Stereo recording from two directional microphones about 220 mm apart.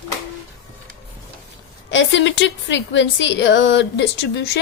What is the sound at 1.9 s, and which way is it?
A woman's voice, 55° left (ahead or behind).